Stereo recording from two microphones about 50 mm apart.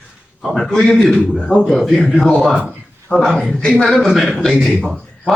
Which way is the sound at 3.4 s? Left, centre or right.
Centre.